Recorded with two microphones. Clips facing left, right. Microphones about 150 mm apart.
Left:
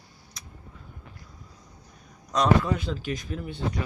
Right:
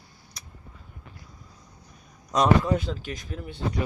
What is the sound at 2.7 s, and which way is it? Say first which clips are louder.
Speech: right 1 dB; 40° right (ahead or behind).